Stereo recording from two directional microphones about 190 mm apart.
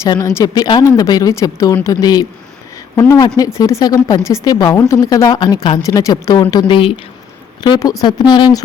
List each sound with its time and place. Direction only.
0.0 s speech: 15° left (ahead or behind)